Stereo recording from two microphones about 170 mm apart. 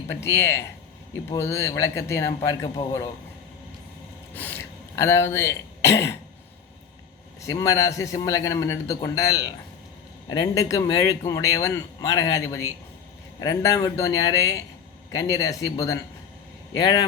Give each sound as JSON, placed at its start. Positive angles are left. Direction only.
{"t": 0.2, "sound": "speech", "side_deg": 15}
{"t": 4.4, "sound": "speech", "side_deg": 10}
{"t": 7.4, "sound": "a man's voice", "side_deg": 20}